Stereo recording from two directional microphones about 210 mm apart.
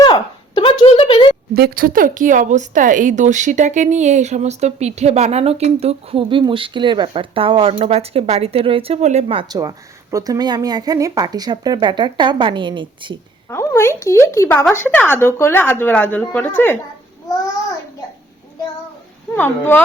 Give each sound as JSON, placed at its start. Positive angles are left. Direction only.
{"t": 0.0, "sound": "a sound", "side_deg": 20}
{"t": 1.5, "sound": "speech", "side_deg": -45}
{"t": 13.5, "sound": "speech", "side_deg": 10}
{"t": 19.3, "sound": "speech", "side_deg": 10}